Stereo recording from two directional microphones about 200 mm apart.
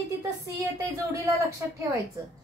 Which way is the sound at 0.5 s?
15° right (ahead or behind).